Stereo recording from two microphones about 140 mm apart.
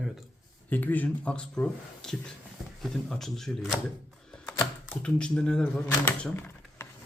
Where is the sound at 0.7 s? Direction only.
10° left (ahead or behind).